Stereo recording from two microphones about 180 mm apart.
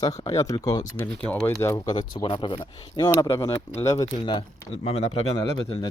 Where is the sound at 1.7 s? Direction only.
25° left (ahead or behind).